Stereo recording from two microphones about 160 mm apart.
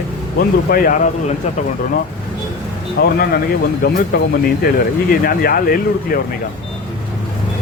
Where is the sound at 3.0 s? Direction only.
65° left (ahead or behind).